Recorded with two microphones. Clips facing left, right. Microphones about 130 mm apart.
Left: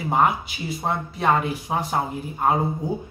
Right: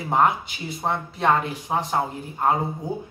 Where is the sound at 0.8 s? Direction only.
5° left (ahead or behind).